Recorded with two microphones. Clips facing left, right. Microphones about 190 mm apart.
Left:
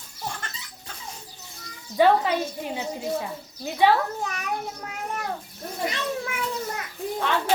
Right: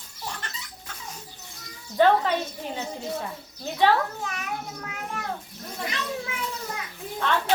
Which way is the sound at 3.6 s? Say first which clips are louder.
Left 1 dB; 15° left (ahead or behind).